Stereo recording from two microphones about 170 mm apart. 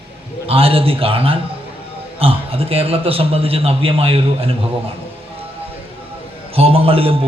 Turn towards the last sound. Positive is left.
turn(degrees=-35)  # may be behind; listen again after turning